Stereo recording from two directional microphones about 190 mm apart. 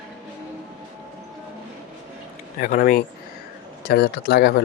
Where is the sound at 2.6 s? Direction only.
50° left (ahead or behind).